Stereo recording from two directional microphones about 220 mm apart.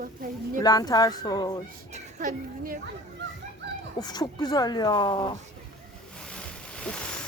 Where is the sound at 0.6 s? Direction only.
15° left (ahead or behind).